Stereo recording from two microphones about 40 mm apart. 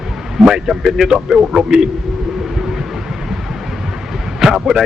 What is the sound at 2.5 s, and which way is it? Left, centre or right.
Vehicle, centre.